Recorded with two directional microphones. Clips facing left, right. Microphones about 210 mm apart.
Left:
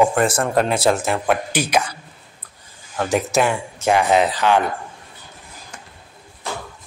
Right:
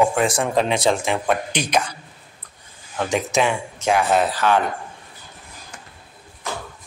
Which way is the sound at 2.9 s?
5° left (ahead or behind).